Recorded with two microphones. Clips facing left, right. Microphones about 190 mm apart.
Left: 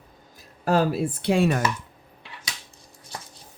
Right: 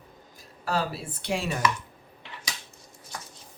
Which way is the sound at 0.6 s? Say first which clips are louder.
Left 8 dB; 50° left (ahead or behind).